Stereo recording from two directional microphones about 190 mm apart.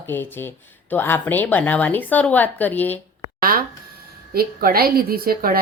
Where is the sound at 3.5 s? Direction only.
50° right (ahead or behind).